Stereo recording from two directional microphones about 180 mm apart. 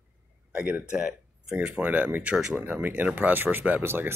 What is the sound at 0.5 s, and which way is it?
Speech, 5° right (ahead or behind).